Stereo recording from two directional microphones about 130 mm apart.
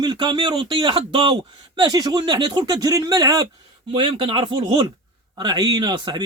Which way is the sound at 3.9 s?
40° right (ahead or behind).